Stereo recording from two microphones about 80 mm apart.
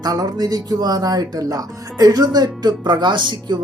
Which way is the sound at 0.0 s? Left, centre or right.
Right.